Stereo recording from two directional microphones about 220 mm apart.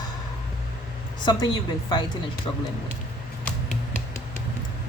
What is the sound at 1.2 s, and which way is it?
Speech, 20° left (ahead or behind).